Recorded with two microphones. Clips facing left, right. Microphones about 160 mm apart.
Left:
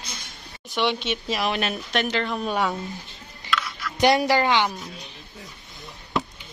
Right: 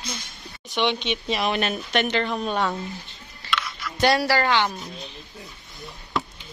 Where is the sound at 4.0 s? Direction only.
20° left (ahead or behind).